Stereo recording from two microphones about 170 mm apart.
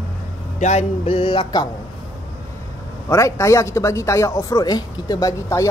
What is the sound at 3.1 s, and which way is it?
Speech, 15° left (ahead or behind).